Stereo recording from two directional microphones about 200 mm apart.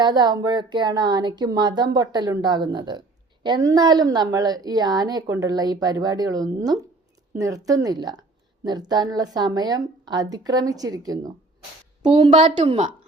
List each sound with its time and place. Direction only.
0.0 s a woman's voice: 20° right (ahead or behind)